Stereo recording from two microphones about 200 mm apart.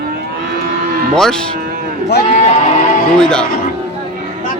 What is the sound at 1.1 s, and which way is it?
Speech, 5° left (ahead or behind).